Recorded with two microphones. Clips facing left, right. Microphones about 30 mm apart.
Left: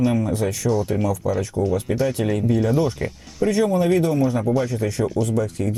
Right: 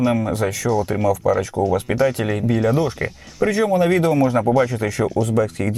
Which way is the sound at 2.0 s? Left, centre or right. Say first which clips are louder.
Right 2 dB; right.